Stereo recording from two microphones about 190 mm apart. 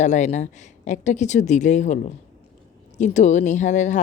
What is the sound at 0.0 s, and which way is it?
Speech, 40° left (ahead or behind).